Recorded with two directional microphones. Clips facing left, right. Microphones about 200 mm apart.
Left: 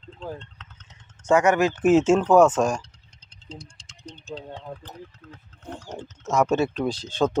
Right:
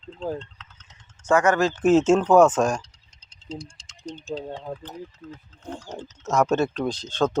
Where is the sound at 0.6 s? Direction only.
55° left (ahead or behind).